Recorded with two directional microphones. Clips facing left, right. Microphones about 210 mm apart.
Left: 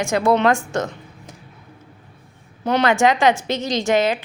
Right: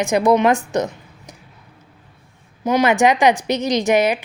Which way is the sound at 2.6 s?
10° right (ahead or behind).